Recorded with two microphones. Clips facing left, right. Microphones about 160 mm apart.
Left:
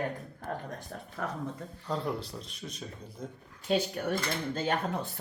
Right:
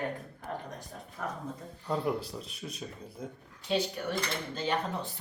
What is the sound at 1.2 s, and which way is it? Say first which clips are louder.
Speech: left 1 dB; 65° left (ahead or behind).